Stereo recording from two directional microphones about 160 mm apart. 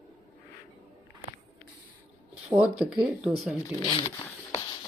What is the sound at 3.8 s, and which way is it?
Speech, 30° left (ahead or behind).